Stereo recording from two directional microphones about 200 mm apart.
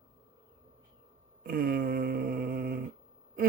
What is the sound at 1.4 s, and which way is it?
Speech, 45° right (ahead or behind).